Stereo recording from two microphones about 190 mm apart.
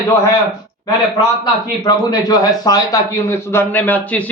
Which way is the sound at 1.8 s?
20° left (ahead or behind).